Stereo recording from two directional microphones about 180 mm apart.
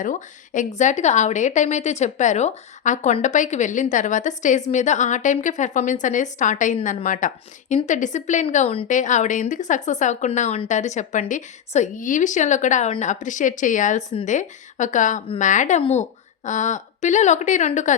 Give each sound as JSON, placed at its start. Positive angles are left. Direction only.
{"t": 0.0, "sound": "a woman's voice", "side_deg": 45}
{"t": 8.9, "sound": "a woman's voice", "side_deg": 45}